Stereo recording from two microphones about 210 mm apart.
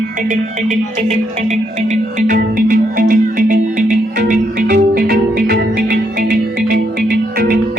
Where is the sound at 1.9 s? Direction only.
40° right (ahead or behind).